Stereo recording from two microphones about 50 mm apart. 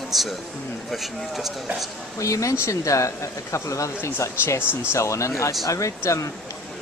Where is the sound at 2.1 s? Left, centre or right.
Left.